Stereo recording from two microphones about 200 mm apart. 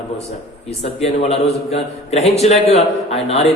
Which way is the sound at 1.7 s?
30° left (ahead or behind).